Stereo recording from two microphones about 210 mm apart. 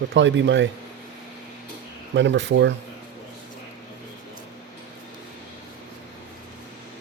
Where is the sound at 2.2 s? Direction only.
60° right (ahead or behind).